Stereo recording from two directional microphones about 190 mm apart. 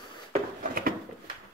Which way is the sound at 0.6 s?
50° right (ahead or behind).